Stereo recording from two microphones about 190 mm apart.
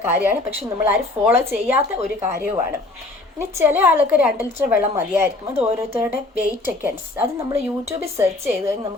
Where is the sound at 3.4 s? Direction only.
10° right (ahead or behind).